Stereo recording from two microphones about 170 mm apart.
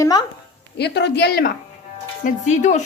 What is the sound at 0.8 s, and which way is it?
Speech, 80° left.